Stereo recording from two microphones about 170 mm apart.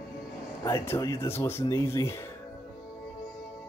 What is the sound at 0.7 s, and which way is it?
Speech, 15° left (ahead or behind).